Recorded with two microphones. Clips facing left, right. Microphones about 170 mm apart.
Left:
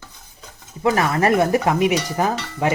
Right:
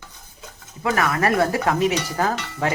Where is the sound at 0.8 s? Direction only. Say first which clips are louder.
Left 3 dB; 30° left (ahead or behind).